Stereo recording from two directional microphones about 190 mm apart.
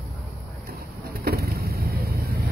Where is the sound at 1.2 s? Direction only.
55° right (ahead or behind).